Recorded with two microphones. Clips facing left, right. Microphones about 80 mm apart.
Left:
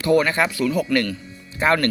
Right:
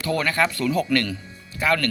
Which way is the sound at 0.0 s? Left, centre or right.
Centre.